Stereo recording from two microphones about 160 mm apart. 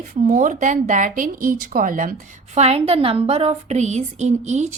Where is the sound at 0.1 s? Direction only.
50° right (ahead or behind).